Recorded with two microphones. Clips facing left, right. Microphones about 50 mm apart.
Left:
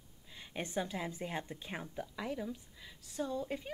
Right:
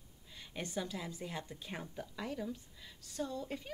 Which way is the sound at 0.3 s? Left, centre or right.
Centre.